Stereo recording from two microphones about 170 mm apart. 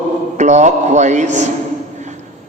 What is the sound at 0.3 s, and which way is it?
A man's voice, 45° right (ahead or behind).